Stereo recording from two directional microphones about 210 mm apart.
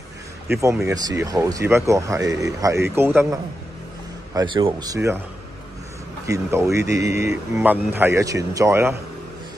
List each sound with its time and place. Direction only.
0.5 s a man's voice: 15° right (ahead or behind)
6.2 s a man's voice: 15° right (ahead or behind)